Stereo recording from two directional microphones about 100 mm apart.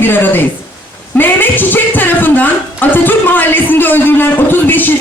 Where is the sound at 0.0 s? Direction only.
20° left (ahead or behind).